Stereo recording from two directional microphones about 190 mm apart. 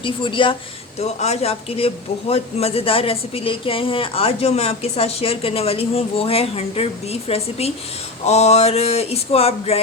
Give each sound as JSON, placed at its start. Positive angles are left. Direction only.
{"t": 0.0, "sound": "speech", "side_deg": 25}